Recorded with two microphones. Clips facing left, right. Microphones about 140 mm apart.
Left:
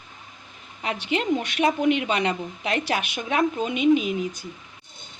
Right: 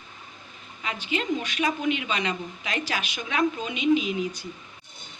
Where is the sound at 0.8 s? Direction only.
65° left (ahead or behind).